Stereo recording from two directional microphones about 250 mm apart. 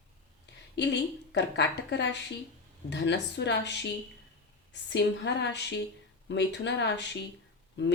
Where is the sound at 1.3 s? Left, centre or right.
Left.